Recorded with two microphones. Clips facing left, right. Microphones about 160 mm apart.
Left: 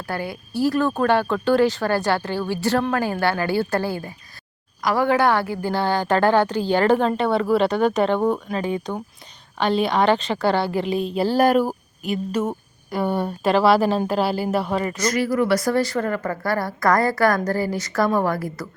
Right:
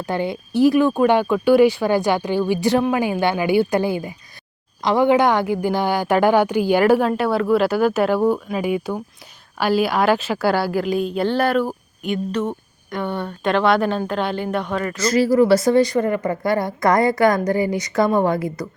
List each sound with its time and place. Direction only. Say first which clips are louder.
0.0 s a woman's voice: right 5 dB; 20° right (ahead or behind); by 11.3 s centre (ahead or behind)
11.3 s a woman's voice: left 5 dB; 10° left (ahead or behind)
15.0 s speech: right 7 dB; 30° right (ahead or behind)